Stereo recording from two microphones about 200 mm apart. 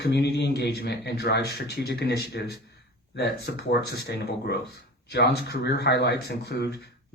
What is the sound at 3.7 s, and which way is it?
Speech, 55° left (ahead or behind).